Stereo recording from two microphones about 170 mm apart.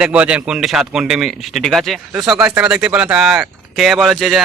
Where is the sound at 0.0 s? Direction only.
5° right (ahead or behind).